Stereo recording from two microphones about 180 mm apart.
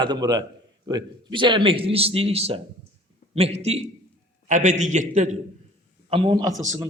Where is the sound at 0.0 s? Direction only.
25° right (ahead or behind); by 5.4 s 40° right (ahead or behind).